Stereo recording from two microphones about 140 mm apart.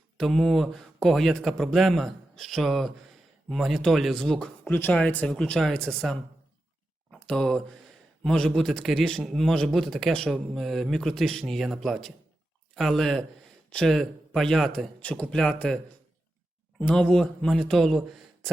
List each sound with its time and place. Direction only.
0.2 s a man's voice: centre (ahead or behind)
7.1 s a sound: 5° left (ahead or behind)
8.2 s a man's voice: centre (ahead or behind)
16.8 s a man's voice: 5° left (ahead or behind)